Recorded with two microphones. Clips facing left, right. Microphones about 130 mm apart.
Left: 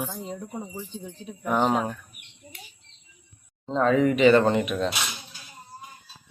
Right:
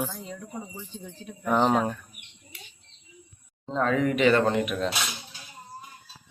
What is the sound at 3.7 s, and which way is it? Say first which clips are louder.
Speech: left 4 dB; centre (ahead or behind).